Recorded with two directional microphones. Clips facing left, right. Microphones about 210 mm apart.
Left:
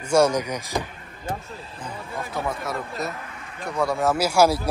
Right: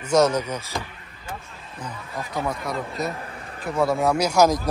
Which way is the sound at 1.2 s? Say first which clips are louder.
Left 6 dB; 35° left (ahead or behind).